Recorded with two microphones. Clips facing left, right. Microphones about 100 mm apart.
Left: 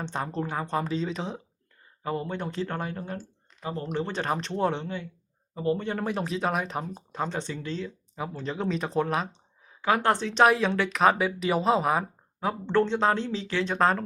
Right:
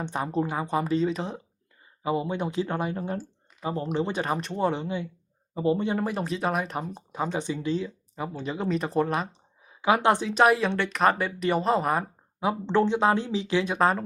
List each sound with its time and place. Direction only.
0.0 s speech: 10° right (ahead or behind)
2.0 s speech: 15° right (ahead or behind)
5.5 s speech: 20° right (ahead or behind)
6.0 s speech: centre (ahead or behind)
8.1 s speech: centre (ahead or behind)
12.5 s speech: 15° right (ahead or behind)